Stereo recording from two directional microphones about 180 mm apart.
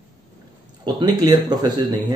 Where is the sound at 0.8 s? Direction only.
20° right (ahead or behind).